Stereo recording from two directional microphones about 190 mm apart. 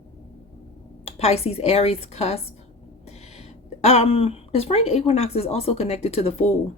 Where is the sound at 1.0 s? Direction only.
35° left (ahead or behind).